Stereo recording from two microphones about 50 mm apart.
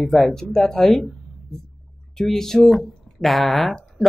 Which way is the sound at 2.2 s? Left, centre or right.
Centre.